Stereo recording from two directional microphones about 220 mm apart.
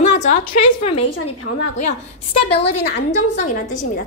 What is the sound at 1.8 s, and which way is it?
Speech, 25° left (ahead or behind).